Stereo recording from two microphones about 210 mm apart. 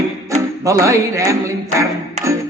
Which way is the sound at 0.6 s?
15° right (ahead or behind).